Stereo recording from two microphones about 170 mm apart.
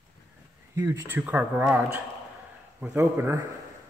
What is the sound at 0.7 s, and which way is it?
Speech, 15° right (ahead or behind).